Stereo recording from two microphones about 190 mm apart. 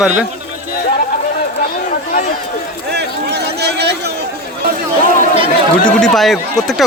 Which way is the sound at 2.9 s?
60° right (ahead or behind).